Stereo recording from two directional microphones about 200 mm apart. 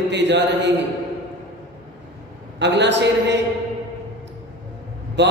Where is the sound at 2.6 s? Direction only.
60° right (ahead or behind).